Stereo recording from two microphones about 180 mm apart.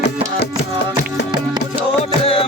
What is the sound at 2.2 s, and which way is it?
Music, 30° left (ahead or behind).